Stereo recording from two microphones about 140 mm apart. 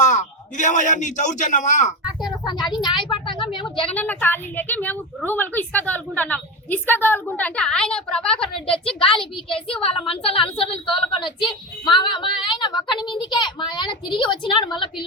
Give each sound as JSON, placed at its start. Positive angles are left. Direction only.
{"t": 0.0, "sound": "a man's voice", "side_deg": 60}
{"t": 2.2, "sound": "a woman's voice", "side_deg": 30}
{"t": 3.8, "sound": "a woman's voice", "side_deg": 10}
{"t": 9.0, "sound": "a woman's voice", "side_deg": 40}